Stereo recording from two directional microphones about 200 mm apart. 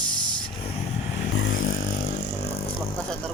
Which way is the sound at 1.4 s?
70° left (ahead or behind).